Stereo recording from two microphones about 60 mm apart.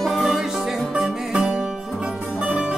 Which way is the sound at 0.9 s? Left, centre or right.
Centre.